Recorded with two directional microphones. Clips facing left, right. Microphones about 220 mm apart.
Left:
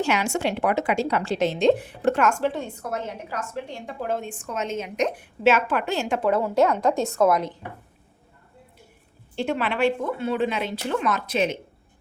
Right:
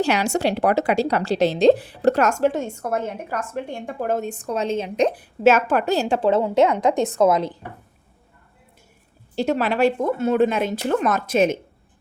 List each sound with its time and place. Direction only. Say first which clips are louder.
0.0 s a woman's voice: right 4 dB; 35° right (ahead or behind)
9.3 s speech: right 4 dB; 40° right (ahead or behind)